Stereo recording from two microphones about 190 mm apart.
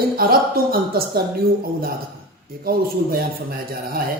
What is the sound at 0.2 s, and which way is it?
A man's voice, 50° right (ahead or behind).